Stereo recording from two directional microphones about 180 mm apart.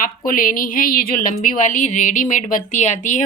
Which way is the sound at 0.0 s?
50° left (ahead or behind).